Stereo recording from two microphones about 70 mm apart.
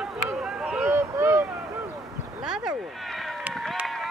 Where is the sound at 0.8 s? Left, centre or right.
Right.